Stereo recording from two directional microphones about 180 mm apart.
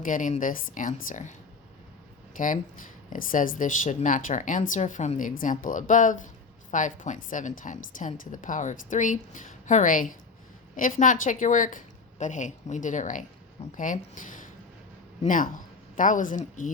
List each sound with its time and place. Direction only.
0.0 s a woman's voice: 45° left (ahead or behind)
2.4 s a woman's voice: 50° left (ahead or behind)